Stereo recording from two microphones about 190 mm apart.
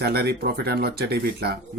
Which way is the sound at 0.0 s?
60° right (ahead or behind).